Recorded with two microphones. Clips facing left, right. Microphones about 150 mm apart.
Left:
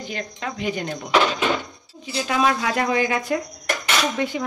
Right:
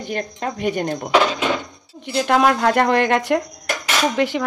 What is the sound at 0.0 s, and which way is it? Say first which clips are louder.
Speech: right 5 dB; 55° right (ahead or behind).